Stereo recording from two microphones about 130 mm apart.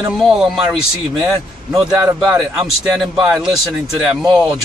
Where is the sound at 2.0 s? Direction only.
20° right (ahead or behind).